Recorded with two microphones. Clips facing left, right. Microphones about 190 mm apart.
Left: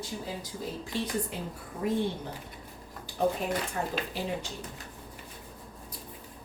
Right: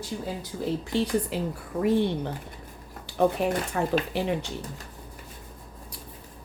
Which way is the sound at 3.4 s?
70° right (ahead or behind).